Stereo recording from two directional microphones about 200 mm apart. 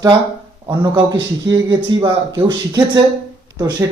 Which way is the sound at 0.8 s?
20° right (ahead or behind).